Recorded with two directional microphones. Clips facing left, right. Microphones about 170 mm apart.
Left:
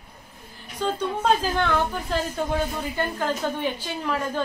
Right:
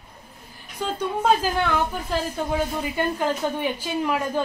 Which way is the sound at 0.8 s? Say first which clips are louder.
Left 2 dB; 10° right (ahead or behind).